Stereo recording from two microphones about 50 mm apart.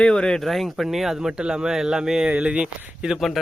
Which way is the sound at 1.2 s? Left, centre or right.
Centre.